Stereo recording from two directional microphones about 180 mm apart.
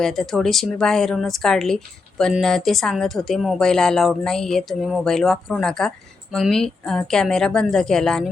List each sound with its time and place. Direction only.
0.0 s speech: centre (ahead or behind)